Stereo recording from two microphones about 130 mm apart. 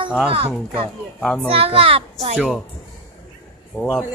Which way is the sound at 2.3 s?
5° right (ahead or behind).